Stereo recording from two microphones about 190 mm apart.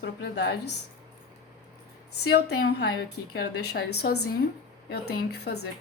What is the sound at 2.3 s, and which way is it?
A woman's voice, 55° left (ahead or behind).